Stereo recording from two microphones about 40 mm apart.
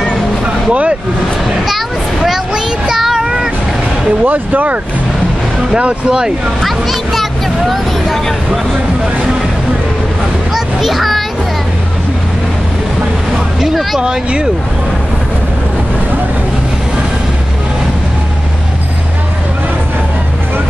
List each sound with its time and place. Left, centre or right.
0.7 s speech: right
1.7 s a sound: centre
3.2 s vehicle: centre
4.2 s speech: right
5.8 s speech: right
6.6 s music: centre
10.5 s a sound: centre
14.0 s speech: right